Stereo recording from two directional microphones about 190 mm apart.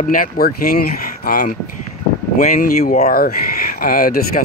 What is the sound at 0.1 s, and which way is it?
Speech, 50° left (ahead or behind).